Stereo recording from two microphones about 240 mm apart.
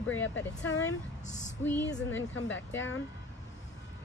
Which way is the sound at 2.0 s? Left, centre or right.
Left.